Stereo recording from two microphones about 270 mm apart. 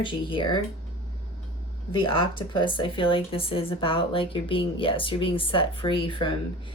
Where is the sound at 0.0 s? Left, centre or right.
Centre.